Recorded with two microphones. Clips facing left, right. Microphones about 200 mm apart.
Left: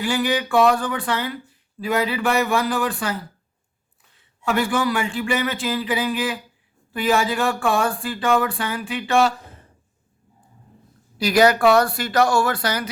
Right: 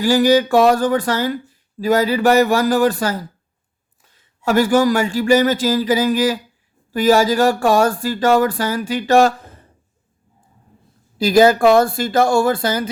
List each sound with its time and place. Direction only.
0.0 s speech: 40° right (ahead or behind)
11.3 s speech: 25° right (ahead or behind)